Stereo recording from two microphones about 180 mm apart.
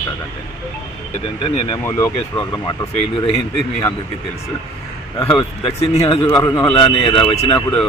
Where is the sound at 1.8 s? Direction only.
15° left (ahead or behind).